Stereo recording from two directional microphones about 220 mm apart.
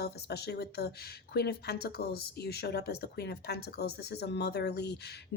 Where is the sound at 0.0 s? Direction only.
45° left (ahead or behind).